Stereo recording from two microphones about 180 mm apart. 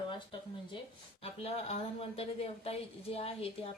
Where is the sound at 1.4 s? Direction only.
35° left (ahead or behind).